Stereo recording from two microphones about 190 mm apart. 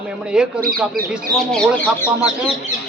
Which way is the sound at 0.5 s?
50° right (ahead or behind).